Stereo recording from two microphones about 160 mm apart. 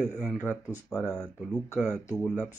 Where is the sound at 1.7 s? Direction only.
10° right (ahead or behind).